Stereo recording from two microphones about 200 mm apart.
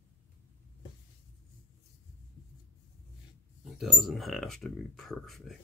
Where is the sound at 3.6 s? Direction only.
Centre (ahead or behind).